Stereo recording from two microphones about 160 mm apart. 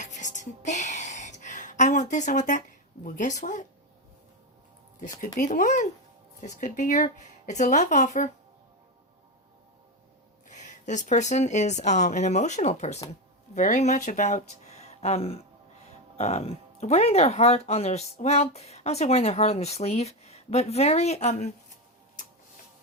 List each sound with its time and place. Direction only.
0.0 s a sound: 50° left (ahead or behind)
5.4 s speech: 50° left (ahead or behind)
10.5 s speech: 50° left (ahead or behind)